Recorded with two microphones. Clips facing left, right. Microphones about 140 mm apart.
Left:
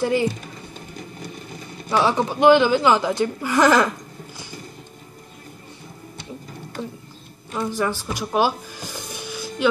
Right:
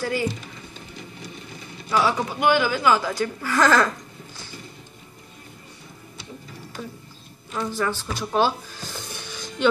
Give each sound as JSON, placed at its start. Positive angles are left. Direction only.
{"t": 0.0, "sound": "speech", "side_deg": 20}
{"t": 0.7, "sound": "a sound", "side_deg": 45}
{"t": 1.9, "sound": "speech", "side_deg": 25}
{"t": 6.8, "sound": "speech", "side_deg": 25}